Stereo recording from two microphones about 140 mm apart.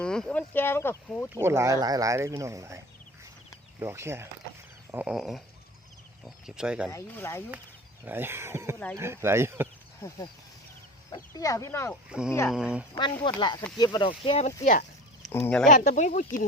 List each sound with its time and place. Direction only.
0.0 s speech: 5° left (ahead or behind)
1.4 s speech: 20° right (ahead or behind)
5.0 s speech: 5° right (ahead or behind)
6.9 s speech: 20° left (ahead or behind)
8.0 s speech: 15° right (ahead or behind)
11.1 s speech: 25° left (ahead or behind)
12.5 s speech: 5° right (ahead or behind)
12.9 s speech: 35° left (ahead or behind)
14.3 s speech: 50° left (ahead or behind)
15.4 s speech: 5° left (ahead or behind)
15.7 s speech: 60° left (ahead or behind)